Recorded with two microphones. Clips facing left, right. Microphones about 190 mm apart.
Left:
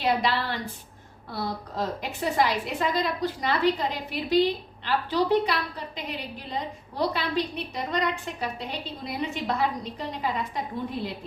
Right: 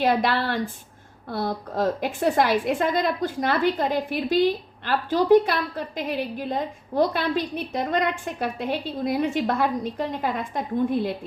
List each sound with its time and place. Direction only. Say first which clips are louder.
0.0 s a woman's voice: right 4 dB; 50° right (ahead or behind)